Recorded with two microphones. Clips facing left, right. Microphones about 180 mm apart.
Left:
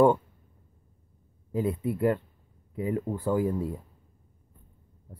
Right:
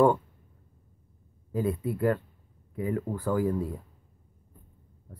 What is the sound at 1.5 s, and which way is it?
Speech, 20° left (ahead or behind).